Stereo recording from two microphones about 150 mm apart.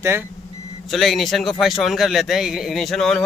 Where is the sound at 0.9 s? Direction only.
Centre (ahead or behind).